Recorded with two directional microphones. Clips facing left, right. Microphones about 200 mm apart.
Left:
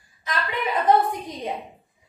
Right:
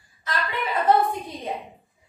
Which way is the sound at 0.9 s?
15° left (ahead or behind).